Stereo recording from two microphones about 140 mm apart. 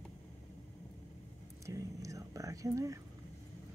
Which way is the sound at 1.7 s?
25° right (ahead or behind).